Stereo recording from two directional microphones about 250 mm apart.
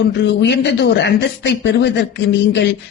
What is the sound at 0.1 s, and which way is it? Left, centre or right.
A woman's voice, left.